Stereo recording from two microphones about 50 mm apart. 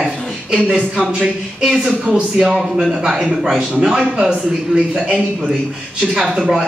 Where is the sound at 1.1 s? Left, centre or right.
Centre.